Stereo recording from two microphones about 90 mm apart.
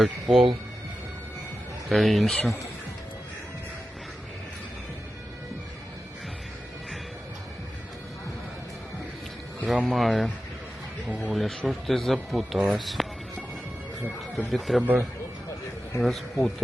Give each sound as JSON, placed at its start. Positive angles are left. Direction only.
{"t": 0.0, "sound": "a man's voice", "side_deg": 0}
{"t": 1.9, "sound": "a man's voice", "side_deg": 0}
{"t": 9.8, "sound": "a man's voice", "side_deg": 0}
{"t": 11.3, "sound": "a man's voice", "side_deg": 0}
{"t": 14.3, "sound": "a man's voice", "side_deg": 0}
{"t": 16.0, "sound": "a man's voice", "side_deg": 0}